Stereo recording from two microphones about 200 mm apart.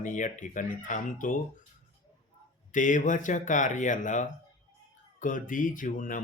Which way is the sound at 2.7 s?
40° left (ahead or behind).